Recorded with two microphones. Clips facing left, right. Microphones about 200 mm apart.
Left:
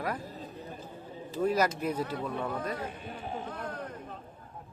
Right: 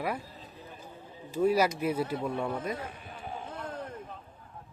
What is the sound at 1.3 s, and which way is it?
Speech, 10° right (ahead or behind).